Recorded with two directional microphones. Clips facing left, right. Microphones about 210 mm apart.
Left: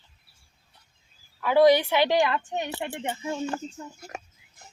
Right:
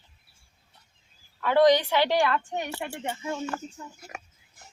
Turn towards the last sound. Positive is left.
turn(degrees=20)  # may be behind; listen again after turning